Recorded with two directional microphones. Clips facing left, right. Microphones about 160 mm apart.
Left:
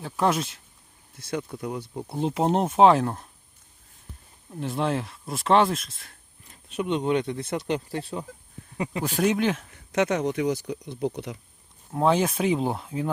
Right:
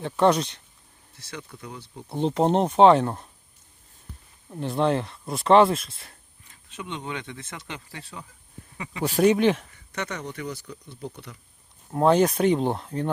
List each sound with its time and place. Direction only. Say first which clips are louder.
0.0 s speech: right 4 dB; 5° left (ahead or behind)
1.2 s speech: left 9 dB; 50° left (ahead or behind)
2.1 s speech: right 2 dB; 5° left (ahead or behind)
4.6 s speech: right 3 dB; centre (ahead or behind)
7.0 s speech: left 10 dB; 45° left (ahead or behind)
9.0 s speech: right 4 dB; centre (ahead or behind)
10.0 s speech: left 9 dB; 90° left
11.9 s speech: right 3 dB; centre (ahead or behind)